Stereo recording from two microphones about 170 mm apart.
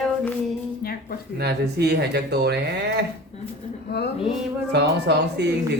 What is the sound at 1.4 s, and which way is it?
Speech, 75° right (ahead or behind).